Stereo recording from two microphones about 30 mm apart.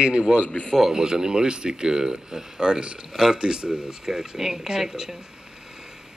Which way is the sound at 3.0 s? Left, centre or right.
Centre.